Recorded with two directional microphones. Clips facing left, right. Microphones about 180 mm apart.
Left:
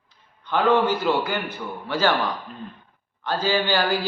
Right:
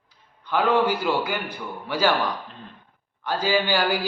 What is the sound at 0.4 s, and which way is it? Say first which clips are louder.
A man's voice: left 1 dB; 10° right (ahead or behind).